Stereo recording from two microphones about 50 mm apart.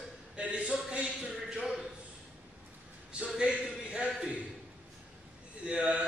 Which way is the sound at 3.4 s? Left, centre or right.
Centre.